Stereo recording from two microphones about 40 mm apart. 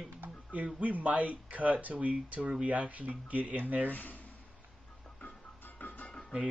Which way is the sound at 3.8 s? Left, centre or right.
Left.